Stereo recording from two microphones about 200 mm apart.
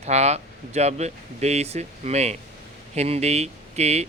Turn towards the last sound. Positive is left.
turn(degrees=-35)  # may be behind; listen again after turning